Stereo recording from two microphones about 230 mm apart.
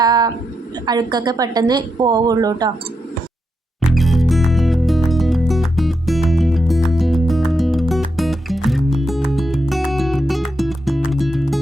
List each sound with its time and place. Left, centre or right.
0.0 s a sound: centre
0.9 s a woman's voice: centre
3.8 s music: centre